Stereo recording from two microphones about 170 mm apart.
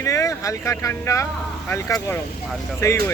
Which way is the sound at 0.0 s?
20° left (ahead or behind).